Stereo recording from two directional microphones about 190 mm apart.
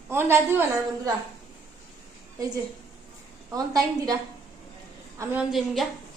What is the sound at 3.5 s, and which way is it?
Speech, 20° right (ahead or behind).